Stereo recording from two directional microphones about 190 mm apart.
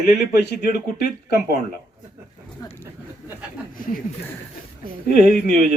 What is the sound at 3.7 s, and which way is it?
Speech, 45° left (ahead or behind).